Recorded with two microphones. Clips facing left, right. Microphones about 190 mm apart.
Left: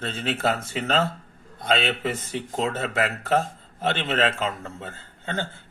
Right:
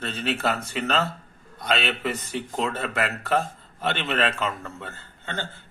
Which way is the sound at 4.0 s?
25° left (ahead or behind).